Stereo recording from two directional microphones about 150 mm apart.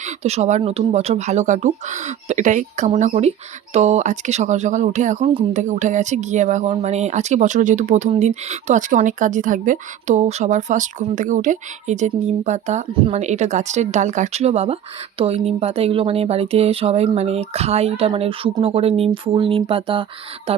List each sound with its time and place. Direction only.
0.2 s speech: 45° right (ahead or behind)